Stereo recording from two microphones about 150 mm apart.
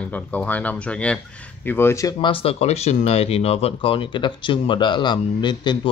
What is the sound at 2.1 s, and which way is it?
Speech, 35° left (ahead or behind).